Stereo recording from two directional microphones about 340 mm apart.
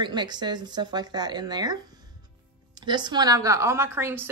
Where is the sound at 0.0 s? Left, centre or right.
Centre.